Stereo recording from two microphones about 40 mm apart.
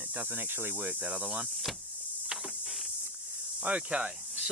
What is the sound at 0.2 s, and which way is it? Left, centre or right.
Speech, right.